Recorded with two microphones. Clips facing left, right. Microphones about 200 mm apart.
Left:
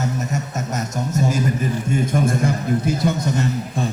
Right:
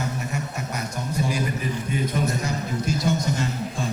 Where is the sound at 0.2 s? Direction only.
40° left (ahead or behind).